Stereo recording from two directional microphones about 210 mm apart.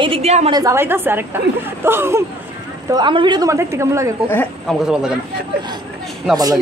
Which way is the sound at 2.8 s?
20° right (ahead or behind).